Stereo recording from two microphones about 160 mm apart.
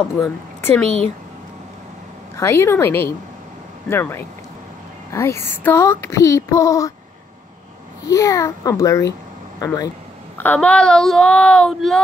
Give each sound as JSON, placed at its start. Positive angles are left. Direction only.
{"t": 0.2, "sound": "speech", "side_deg": 15}
{"t": 2.3, "sound": "speech", "side_deg": 15}
{"t": 8.1, "sound": "a child's voice", "side_deg": 20}